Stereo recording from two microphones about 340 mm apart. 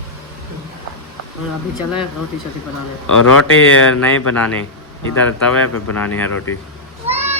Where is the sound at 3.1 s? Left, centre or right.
Left.